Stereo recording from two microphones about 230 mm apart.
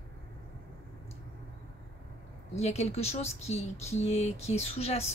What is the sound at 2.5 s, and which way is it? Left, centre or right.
Speech, left.